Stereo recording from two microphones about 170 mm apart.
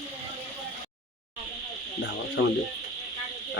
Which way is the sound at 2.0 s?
90° left.